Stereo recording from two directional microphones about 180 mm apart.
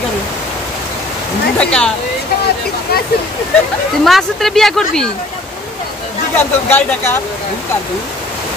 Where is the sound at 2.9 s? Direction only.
60° left (ahead or behind).